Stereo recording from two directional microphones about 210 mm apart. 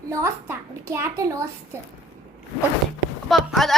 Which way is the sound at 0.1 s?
15° right (ahead or behind).